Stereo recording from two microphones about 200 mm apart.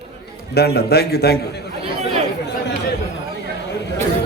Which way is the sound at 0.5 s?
55° left (ahead or behind).